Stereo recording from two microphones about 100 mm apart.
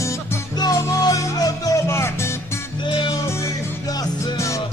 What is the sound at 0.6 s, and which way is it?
Music, 40° left (ahead or behind).